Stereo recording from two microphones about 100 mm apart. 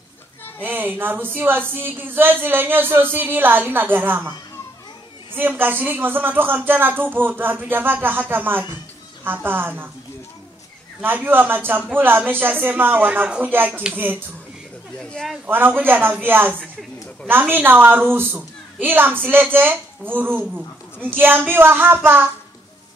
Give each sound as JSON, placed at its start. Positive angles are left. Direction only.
{"t": 0.6, "sound": "speech", "side_deg": -20}
{"t": 5.3, "sound": "speech", "side_deg": -20}
{"t": 11.0, "sound": "speech", "side_deg": -20}
{"t": 15.4, "sound": "speech", "side_deg": -20}